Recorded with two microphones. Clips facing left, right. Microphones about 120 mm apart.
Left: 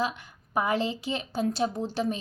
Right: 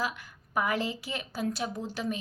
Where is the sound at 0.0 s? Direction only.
25° left (ahead or behind).